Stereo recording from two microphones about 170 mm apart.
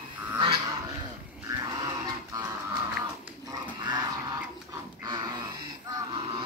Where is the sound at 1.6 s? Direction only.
25° right (ahead or behind).